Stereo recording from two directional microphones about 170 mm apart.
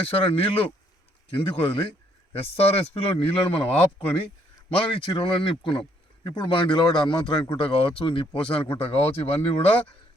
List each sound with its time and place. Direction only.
0.1 s speech: 35° left (ahead or behind)